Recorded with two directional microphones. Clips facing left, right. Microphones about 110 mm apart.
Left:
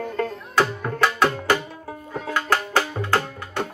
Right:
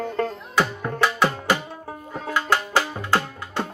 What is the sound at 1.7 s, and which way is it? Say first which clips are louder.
Music: even; 30° right (ahead or behind).